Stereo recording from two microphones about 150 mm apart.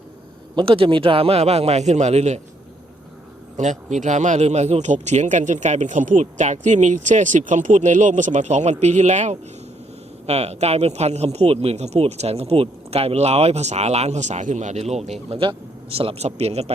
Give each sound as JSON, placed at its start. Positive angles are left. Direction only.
{"t": 0.5, "sound": "speech", "side_deg": -35}
{"t": 3.6, "sound": "speech", "side_deg": -55}